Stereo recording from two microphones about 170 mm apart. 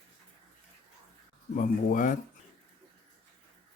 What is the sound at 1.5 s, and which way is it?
Speech, 50° left (ahead or behind).